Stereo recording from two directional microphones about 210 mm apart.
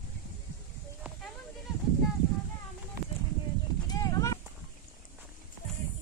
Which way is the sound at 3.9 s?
15° left (ahead or behind).